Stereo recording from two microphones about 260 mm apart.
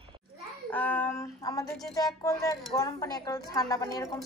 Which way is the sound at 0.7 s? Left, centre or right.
Centre.